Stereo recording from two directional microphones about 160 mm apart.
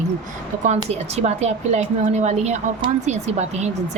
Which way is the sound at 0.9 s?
40° right (ahead or behind).